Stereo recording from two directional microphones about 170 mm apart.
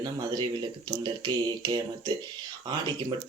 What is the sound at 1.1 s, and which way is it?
Speech, 25° right (ahead or behind).